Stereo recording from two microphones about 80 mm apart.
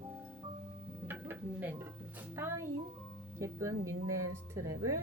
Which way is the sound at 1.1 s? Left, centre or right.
Right.